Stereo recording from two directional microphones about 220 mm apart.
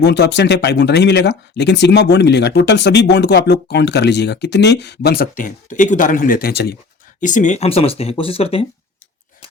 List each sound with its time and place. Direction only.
0.0 s speech: 50° left (ahead or behind)
7.2 s speech: 35° left (ahead or behind)